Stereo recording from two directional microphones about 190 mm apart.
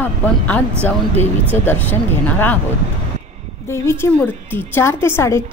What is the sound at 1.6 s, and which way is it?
Speech, 10° left (ahead or behind).